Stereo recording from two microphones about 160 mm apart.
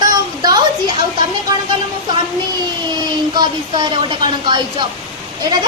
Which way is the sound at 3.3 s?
30° right (ahead or behind).